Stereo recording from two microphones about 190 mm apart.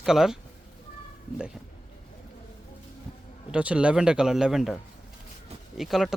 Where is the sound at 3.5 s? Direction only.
5° right (ahead or behind).